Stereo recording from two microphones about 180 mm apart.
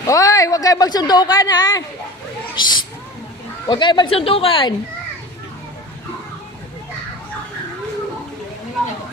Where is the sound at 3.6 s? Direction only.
25° left (ahead or behind).